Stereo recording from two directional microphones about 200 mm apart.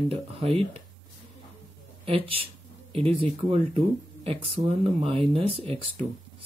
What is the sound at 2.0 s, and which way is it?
Speech, 25° right (ahead or behind).